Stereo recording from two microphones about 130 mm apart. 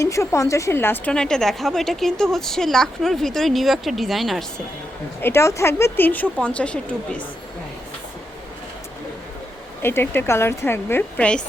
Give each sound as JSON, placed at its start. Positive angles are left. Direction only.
{"t": 0.0, "sound": "speech", "side_deg": 25}
{"t": 1.1, "sound": "a woman's voice", "side_deg": 5}
{"t": 5.2, "sound": "a woman's voice", "side_deg": 20}
{"t": 9.8, "sound": "a woman's voice", "side_deg": 15}